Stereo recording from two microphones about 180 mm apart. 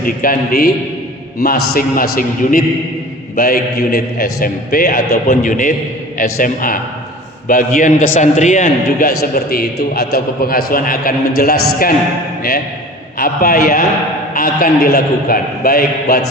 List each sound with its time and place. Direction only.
0.0 s a man's voice: 50° left (ahead or behind)
13.1 s a man's voice: 55° left (ahead or behind)